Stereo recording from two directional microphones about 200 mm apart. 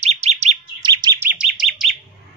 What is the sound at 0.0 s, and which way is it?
Chirp, 30° right (ahead or behind).